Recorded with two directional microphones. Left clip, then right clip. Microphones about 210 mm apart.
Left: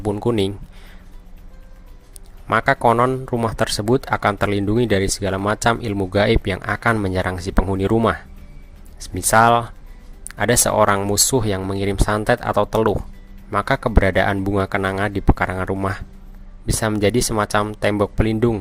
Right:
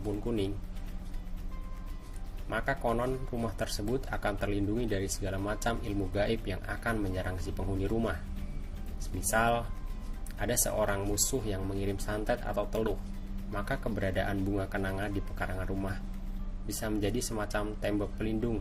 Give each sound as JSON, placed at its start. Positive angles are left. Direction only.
{"t": 0.3, "sound": "speech", "side_deg": 45}
{"t": 2.5, "sound": "speech", "side_deg": 40}
{"t": 9.3, "sound": "speech", "side_deg": 40}